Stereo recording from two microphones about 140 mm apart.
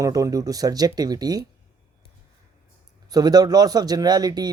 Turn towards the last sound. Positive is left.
turn(degrees=-30)  # may be behind; listen again after turning